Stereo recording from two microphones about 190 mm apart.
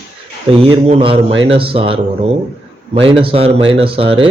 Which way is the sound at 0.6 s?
30° right (ahead or behind).